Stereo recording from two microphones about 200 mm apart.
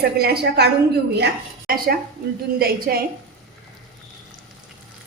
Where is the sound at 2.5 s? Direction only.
50° right (ahead or behind).